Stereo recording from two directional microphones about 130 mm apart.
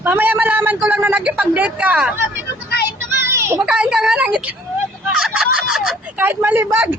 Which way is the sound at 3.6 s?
5° right (ahead or behind).